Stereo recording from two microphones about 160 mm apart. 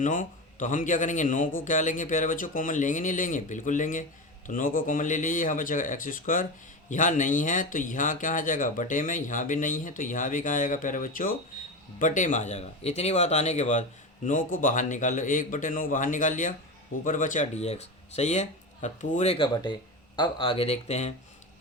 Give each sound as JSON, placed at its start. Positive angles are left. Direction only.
{"t": 0.0, "sound": "a man's voice", "side_deg": 55}
{"t": 20.1, "sound": "speech", "side_deg": 30}